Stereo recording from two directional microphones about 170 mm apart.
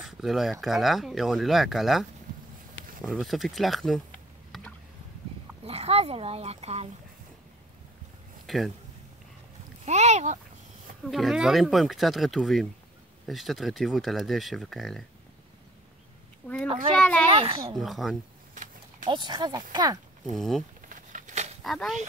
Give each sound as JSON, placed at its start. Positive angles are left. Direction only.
{"t": 0.0, "sound": "speech", "side_deg": 0}
{"t": 3.0, "sound": "typing", "side_deg": 0}
{"t": 5.6, "sound": "speech", "side_deg": -35}
{"t": 8.5, "sound": "speech", "side_deg": 0}
{"t": 9.8, "sound": "speech", "side_deg": -40}
{"t": 11.1, "sound": "speech", "side_deg": 0}
{"t": 16.4, "sound": "a child's voice", "side_deg": 10}
{"t": 17.4, "sound": "speech", "side_deg": -30}
{"t": 17.7, "sound": "speech", "side_deg": 0}
{"t": 18.5, "sound": "a sound", "side_deg": -50}
{"t": 19.0, "sound": "speech", "side_deg": -25}
{"t": 20.3, "sound": "speech", "side_deg": 0}
{"t": 20.9, "sound": "a sound", "side_deg": -50}
{"t": 21.6, "sound": "speech", "side_deg": 0}